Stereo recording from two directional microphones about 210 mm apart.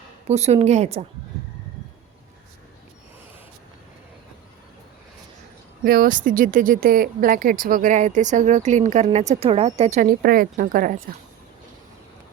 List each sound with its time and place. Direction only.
0.3 s speech: 30° right (ahead or behind)
5.8 s speech: 45° right (ahead or behind)